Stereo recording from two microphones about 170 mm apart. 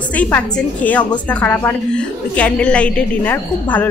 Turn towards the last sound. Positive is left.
turn(degrees=10)  # may be behind; listen again after turning